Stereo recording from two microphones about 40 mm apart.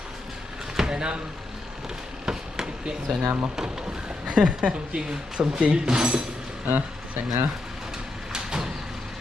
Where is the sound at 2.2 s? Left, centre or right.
Centre.